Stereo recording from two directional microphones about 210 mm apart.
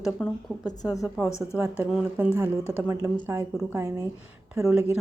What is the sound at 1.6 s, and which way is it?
A woman's voice, 5° right (ahead or behind).